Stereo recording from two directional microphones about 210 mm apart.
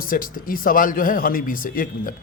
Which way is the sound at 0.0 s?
40° left (ahead or behind).